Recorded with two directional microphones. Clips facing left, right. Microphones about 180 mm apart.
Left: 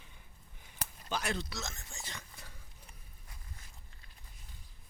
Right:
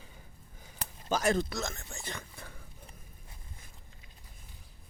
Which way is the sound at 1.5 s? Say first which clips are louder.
Right 7 dB; 55° right (ahead or behind).